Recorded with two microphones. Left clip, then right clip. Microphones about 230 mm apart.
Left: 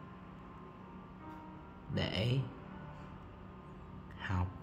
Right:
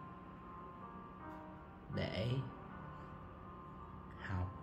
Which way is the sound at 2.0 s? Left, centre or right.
Centre.